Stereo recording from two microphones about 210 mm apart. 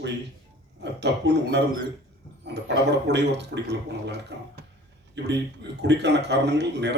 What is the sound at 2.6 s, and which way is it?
A man's voice, 55° right (ahead or behind).